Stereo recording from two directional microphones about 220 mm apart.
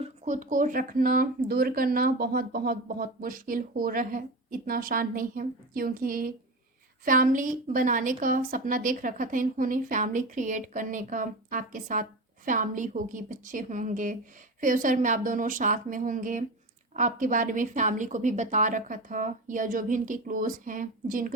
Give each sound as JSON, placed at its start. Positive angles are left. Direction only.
{"t": 0.0, "sound": "a woman's voice", "side_deg": -35}